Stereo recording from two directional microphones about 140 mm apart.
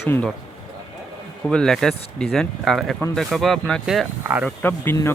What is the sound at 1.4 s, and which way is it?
Speech, 5° left (ahead or behind).